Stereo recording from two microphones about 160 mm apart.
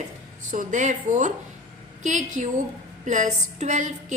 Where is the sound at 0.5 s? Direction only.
50° right (ahead or behind).